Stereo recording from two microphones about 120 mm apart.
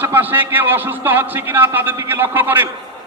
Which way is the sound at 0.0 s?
15° right (ahead or behind).